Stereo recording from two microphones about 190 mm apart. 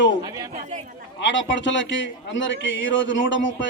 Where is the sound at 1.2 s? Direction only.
70° left (ahead or behind).